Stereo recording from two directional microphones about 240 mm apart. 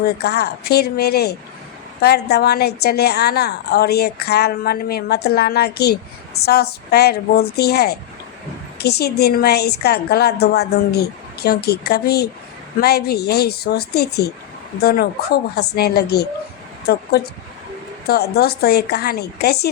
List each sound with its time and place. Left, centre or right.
0.0 s a woman's voice: left